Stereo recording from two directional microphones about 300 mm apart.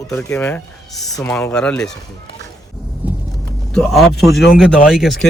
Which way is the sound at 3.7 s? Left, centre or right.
Centre.